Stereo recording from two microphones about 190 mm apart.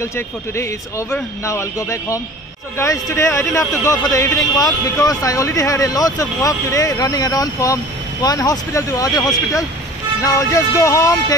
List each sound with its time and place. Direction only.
0.1 s a man's voice: 15° left (ahead or behind)